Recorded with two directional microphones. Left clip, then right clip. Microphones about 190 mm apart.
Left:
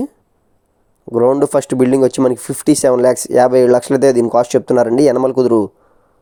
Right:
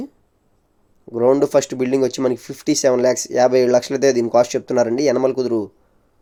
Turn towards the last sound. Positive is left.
turn(degrees=35)  # may be behind; listen again after turning